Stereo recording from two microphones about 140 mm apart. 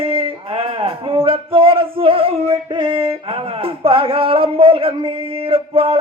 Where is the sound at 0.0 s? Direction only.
40° right (ahead or behind).